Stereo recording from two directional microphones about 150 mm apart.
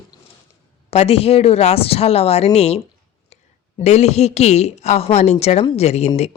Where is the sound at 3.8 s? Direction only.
45° left (ahead or behind).